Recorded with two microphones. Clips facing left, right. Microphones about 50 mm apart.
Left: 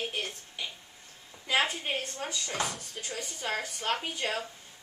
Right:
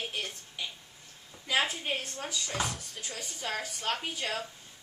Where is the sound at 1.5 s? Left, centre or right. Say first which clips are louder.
Left 1 dB; left.